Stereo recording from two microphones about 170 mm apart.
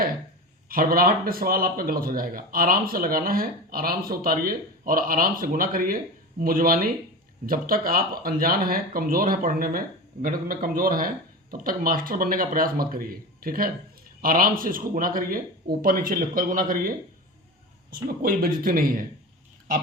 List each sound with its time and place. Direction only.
0.7 s speech: 55° right (ahead or behind)
17.9 s speech: 60° right (ahead or behind)